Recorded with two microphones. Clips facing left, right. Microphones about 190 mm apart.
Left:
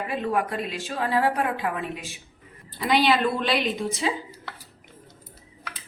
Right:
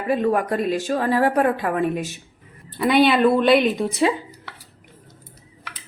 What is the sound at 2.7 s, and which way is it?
Speech, 60° right (ahead or behind).